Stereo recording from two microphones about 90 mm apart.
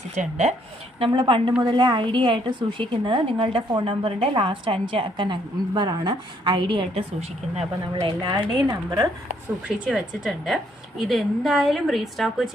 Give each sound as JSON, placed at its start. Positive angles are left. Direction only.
{"t": 0.9, "sound": "a woman's voice", "side_deg": -65}
{"t": 8.2, "sound": "speech", "side_deg": -55}
{"t": 9.6, "sound": "a woman's voice", "side_deg": -10}